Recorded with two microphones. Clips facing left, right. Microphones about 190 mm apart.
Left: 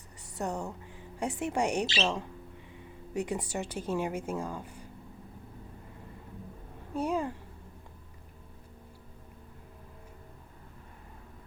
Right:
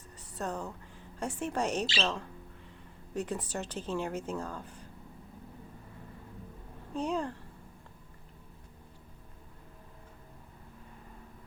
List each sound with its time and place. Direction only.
0.3 s a woman's voice: 15° left (ahead or behind)
6.9 s a woman's voice: 10° left (ahead or behind)